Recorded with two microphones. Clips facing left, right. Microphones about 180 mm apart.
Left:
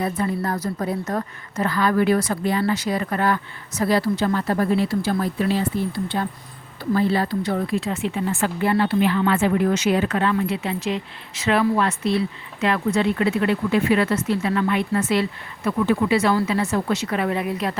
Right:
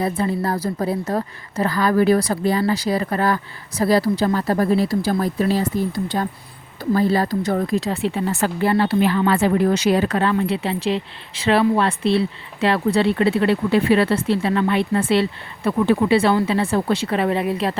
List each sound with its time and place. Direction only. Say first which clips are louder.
0.0 s speech: right 2 dB; 30° right (ahead or behind)